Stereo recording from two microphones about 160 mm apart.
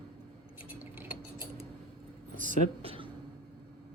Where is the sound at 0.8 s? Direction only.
10° right (ahead or behind).